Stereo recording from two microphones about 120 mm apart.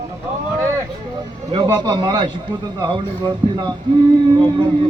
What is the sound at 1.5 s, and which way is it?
A man's voice, 40° right (ahead or behind).